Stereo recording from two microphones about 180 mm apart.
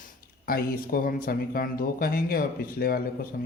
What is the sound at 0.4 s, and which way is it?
Speech, 55° left (ahead or behind).